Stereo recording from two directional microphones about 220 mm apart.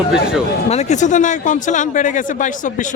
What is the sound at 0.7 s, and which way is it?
Speech, 30° left (ahead or behind).